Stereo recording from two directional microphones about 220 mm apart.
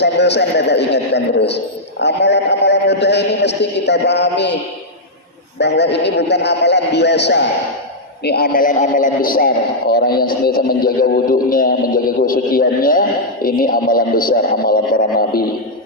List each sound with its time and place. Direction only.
0.0 s speech: 50° left (ahead or behind)
5.5 s a man's voice: 50° left (ahead or behind)